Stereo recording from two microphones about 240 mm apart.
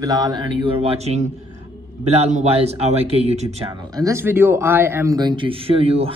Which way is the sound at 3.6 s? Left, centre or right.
Centre.